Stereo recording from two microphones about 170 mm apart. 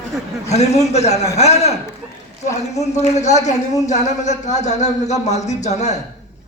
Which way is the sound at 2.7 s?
40° left (ahead or behind).